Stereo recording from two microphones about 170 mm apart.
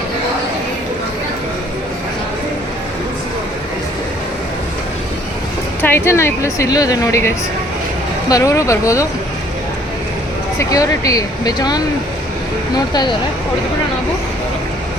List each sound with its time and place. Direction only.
5.8 s a woman's voice: 15° left (ahead or behind)
10.6 s speech: 20° left (ahead or behind)